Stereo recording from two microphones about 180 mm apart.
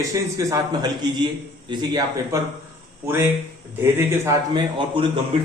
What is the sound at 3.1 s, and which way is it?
A man's voice, 10° right (ahead or behind).